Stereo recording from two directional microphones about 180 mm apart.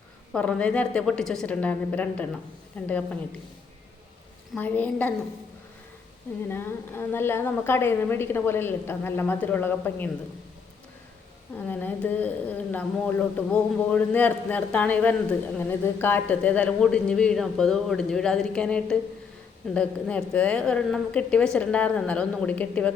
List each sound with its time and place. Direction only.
0.3 s speech: 5° left (ahead or behind)
4.5 s speech: 10° left (ahead or behind)
6.5 s speech: 10° left (ahead or behind)
11.5 s speech: 10° left (ahead or behind)